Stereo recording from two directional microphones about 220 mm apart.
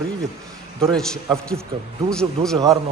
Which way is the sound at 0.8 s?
5° left (ahead or behind).